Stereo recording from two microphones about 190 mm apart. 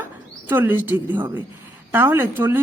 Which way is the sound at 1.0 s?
10° right (ahead or behind).